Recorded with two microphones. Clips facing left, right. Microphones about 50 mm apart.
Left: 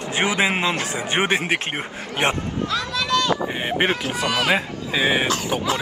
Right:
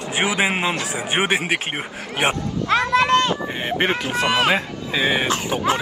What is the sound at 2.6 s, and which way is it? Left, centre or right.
Speech, right.